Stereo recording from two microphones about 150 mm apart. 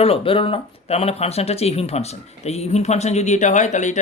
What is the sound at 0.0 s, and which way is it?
Speech, 40° left (ahead or behind).